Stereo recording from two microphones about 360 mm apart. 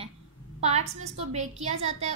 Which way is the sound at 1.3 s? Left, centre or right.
Centre.